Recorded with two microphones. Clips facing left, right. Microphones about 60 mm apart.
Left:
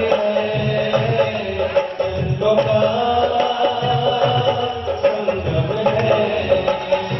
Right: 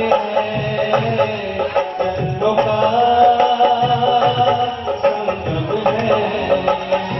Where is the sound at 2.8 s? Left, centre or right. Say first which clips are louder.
Right 4 dB; right.